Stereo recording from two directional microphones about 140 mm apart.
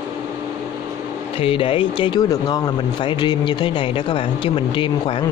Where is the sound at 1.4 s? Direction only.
40° left (ahead or behind).